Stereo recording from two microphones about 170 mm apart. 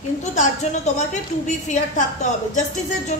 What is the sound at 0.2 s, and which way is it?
Speech, 45° left (ahead or behind).